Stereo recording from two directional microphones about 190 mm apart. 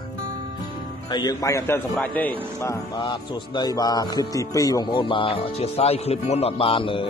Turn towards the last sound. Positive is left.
turn(degrees=25)  # may be behind; listen again after turning